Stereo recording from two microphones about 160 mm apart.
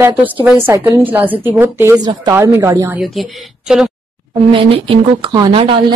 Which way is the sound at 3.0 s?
Centre (ahead or behind).